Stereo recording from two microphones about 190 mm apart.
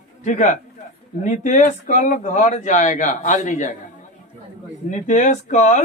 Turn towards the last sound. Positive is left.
turn(degrees=40)  # may be behind; listen again after turning